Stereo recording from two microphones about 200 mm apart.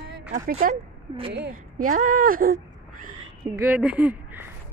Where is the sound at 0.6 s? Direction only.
30° right (ahead or behind).